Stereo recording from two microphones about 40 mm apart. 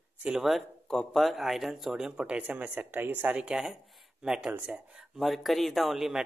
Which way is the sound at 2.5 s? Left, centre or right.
Right.